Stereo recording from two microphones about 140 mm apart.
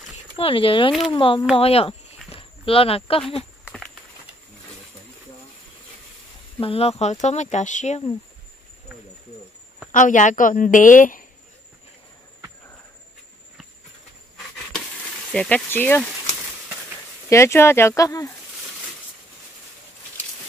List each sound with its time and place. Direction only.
0.4 s speech: 40° left (ahead or behind)
1.6 s a sound: 45° left (ahead or behind)
3.6 s a sound: 5° left (ahead or behind)
6.6 s speech: 45° left (ahead or behind)
9.9 s a woman's voice: 65° left (ahead or behind)
15.3 s speech: 5° left (ahead or behind)
17.3 s speech: 20° left (ahead or behind)